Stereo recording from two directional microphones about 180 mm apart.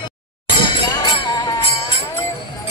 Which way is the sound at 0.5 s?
20° left (ahead or behind).